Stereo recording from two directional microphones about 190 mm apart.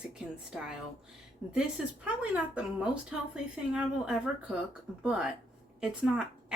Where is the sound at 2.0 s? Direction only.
5° right (ahead or behind).